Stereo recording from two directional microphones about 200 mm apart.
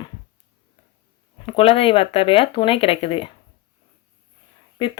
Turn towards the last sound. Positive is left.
turn(degrees=25)  # may be behind; listen again after turning